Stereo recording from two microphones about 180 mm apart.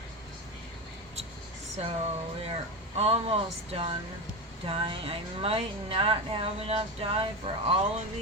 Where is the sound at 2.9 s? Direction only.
35° right (ahead or behind).